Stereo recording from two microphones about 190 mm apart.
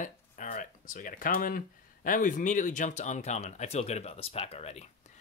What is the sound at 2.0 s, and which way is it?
Speech, 45° left (ahead or behind).